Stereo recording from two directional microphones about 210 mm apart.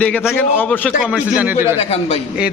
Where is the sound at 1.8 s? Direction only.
25° left (ahead or behind).